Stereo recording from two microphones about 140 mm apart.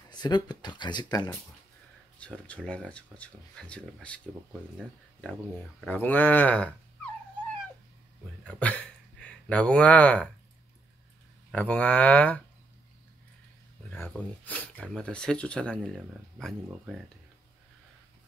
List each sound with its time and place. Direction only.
0.1 s speech: 30° left (ahead or behind)
2.1 s speech: 10° left (ahead or behind)
8.5 s speech: 10° left (ahead or behind)
11.5 s speech: 10° left (ahead or behind)
13.9 s speech: 15° left (ahead or behind)